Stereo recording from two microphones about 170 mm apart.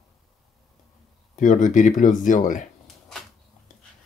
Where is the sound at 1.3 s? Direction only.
45° left (ahead or behind).